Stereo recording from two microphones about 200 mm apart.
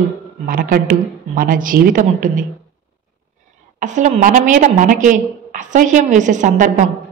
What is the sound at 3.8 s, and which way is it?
A woman's voice, 35° right (ahead or behind).